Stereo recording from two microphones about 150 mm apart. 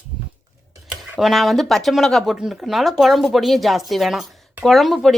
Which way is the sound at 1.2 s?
Centre (ahead or behind).